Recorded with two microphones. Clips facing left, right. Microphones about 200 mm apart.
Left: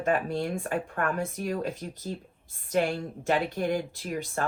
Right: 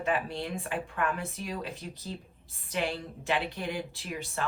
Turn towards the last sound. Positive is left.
turn(degrees=50)  # may be behind; listen again after turning